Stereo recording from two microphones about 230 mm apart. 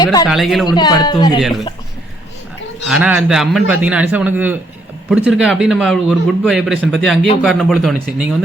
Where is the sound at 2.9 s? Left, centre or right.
Centre.